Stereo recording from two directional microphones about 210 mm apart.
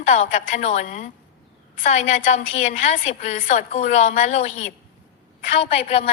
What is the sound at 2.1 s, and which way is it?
A woman's voice, 35° left (ahead or behind).